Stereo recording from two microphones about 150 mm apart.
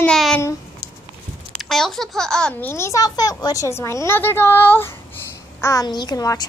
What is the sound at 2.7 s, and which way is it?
A woman's voice, 20° left (ahead or behind).